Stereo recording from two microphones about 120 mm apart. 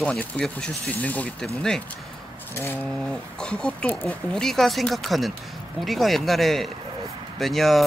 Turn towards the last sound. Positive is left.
turn(degrees=0)  # may be behind; listen again after turning